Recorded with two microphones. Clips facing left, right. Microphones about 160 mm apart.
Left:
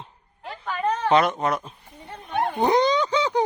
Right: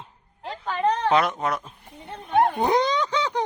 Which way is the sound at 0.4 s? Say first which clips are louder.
Right 2 dB; 30° right (ahead or behind).